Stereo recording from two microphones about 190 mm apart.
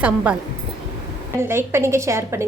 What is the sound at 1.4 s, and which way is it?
A woman's voice, 15° right (ahead or behind).